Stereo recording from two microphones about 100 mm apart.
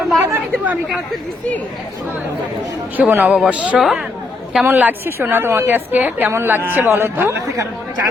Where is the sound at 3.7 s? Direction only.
Centre (ahead or behind).